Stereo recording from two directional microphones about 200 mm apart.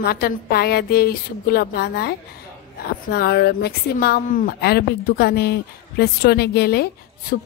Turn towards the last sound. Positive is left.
turn(degrees=50)  # may be behind; listen again after turning